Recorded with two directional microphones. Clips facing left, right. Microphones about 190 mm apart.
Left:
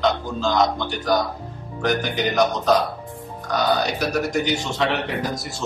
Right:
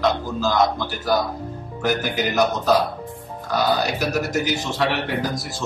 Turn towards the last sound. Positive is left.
turn(degrees=0)  # may be behind; listen again after turning